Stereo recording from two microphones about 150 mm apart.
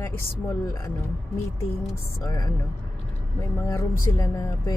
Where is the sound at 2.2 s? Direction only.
25° left (ahead or behind).